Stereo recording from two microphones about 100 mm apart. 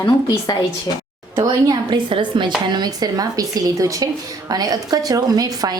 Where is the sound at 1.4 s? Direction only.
45° right (ahead or behind).